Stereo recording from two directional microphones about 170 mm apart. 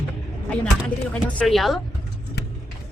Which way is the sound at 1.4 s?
Centre (ahead or behind).